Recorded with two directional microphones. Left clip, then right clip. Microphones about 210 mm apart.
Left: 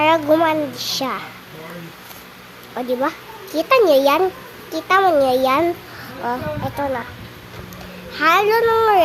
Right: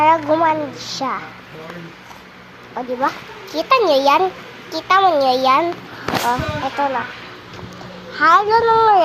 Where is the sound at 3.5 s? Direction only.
35° left (ahead or behind).